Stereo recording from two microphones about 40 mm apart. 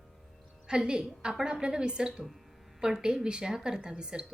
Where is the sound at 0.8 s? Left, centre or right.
Right.